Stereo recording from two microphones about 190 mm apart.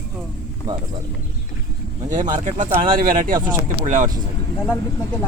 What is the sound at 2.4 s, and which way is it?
Speech, 40° right (ahead or behind).